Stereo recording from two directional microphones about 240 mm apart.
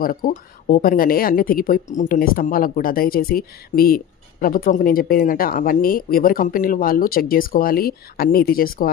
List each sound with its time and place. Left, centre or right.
0.0 s speech: left